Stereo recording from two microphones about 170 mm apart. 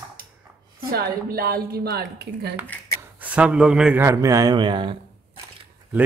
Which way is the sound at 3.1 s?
10° right (ahead or behind).